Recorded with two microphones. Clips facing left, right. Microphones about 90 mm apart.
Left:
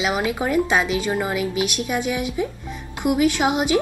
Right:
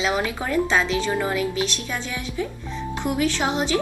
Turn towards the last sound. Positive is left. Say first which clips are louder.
# left 4 dB
turn(degrees=10)  # may be behind; listen again after turning